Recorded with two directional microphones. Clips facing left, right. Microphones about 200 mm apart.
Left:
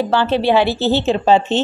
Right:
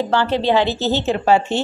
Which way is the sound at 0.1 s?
15° right (ahead or behind).